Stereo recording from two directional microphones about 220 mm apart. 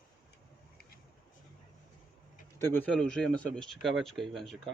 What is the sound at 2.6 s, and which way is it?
A man's voice, 10° left (ahead or behind).